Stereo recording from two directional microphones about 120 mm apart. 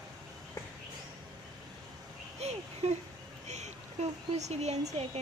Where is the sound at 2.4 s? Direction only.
65° right (ahead or behind).